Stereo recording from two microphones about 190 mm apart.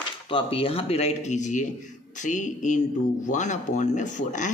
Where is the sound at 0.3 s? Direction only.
25° left (ahead or behind).